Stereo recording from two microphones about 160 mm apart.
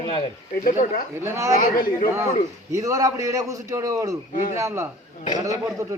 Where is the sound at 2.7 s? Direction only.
20° right (ahead or behind).